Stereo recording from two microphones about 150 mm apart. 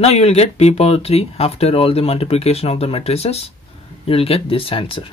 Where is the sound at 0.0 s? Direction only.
45° left (ahead or behind).